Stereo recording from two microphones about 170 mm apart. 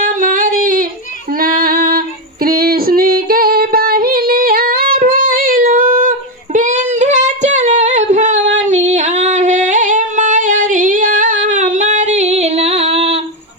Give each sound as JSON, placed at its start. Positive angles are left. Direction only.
{"t": 0.0, "sound": "singing", "side_deg": -50}
{"t": 1.3, "sound": "female singing", "side_deg": -55}
{"t": 8.6, "sound": "singing", "side_deg": -45}